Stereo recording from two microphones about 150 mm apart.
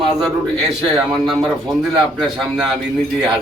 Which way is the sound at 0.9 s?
Centre (ahead or behind).